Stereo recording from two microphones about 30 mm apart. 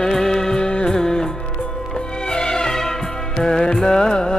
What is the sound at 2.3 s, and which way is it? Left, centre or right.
Music, left.